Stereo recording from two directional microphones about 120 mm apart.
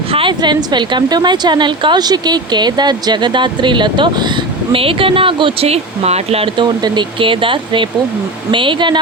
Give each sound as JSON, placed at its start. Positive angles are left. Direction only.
{"t": 0.1, "sound": "a woman's voice", "side_deg": -45}
{"t": 6.6, "sound": "speech", "side_deg": -40}